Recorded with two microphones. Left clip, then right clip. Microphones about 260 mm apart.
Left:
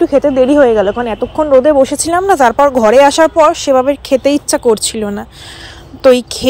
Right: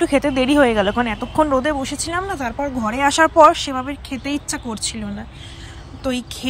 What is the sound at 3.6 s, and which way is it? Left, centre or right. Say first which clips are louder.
Speech: left 15 dB; centre.